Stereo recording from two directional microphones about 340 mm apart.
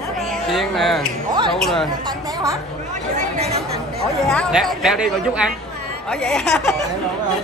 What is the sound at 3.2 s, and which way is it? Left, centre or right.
Speech, centre.